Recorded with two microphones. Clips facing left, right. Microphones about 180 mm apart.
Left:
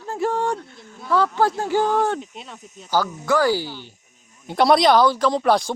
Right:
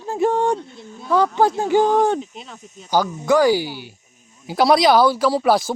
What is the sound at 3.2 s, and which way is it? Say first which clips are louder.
Speech: right 5 dB; 15° right (ahead or behind).